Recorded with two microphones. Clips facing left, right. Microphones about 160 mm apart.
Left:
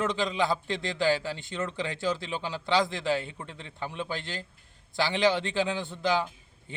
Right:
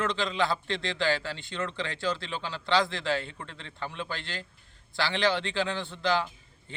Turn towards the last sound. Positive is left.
turn(degrees=15)  # may be behind; listen again after turning